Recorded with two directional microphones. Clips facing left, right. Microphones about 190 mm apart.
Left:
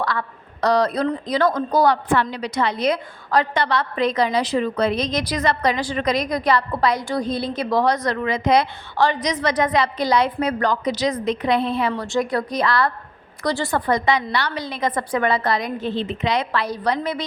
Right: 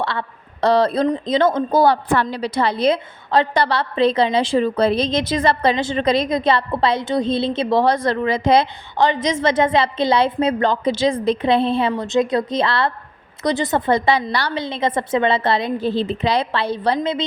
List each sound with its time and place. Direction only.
0.0 s a woman's voice: 25° right (ahead or behind)